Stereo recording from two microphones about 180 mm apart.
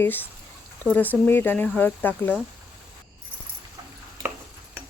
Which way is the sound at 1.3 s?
10° left (ahead or behind).